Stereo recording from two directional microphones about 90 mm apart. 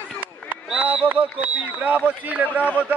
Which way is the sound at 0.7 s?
10° right (ahead or behind).